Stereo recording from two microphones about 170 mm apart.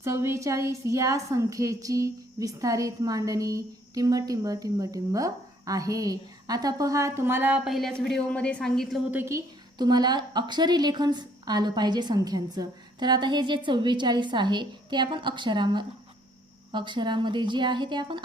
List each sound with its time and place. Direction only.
0.0 s a woman's voice: 15° right (ahead or behind); by 9.0 s 5° left (ahead or behind)
9.1 s a woman's voice: 15° right (ahead or behind)